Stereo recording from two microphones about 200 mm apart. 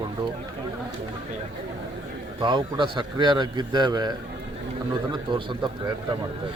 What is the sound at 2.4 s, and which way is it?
A man's voice, 25° right (ahead or behind).